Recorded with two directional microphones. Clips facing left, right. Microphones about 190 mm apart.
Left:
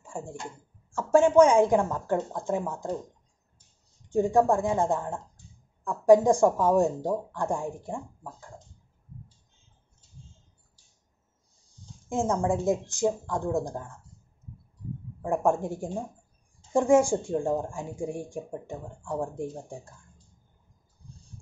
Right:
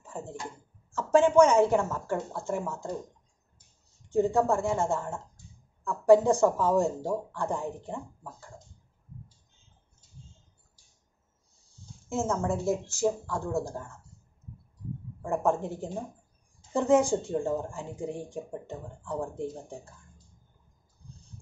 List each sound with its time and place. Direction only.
0.0 s a sound: 10° left (ahead or behind)
0.9 s speech: 10° left (ahead or behind)
4.1 s speech: 15° left (ahead or behind)
12.1 s speech: 15° left (ahead or behind)
15.2 s speech: 15° left (ahead or behind)